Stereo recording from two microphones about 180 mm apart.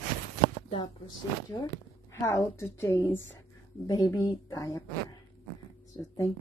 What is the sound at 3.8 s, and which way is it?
A woman's voice, 20° left (ahead or behind).